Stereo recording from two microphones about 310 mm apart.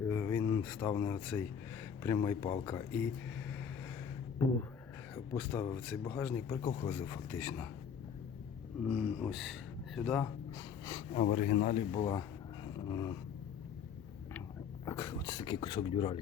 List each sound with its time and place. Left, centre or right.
0.0 s a sound: centre
2.0 s speech: centre
4.4 s speech: centre
8.8 s speech: centre
10.8 s a sound: centre
11.2 s speech: left; by 13.1 s centre
14.8 s speech: centre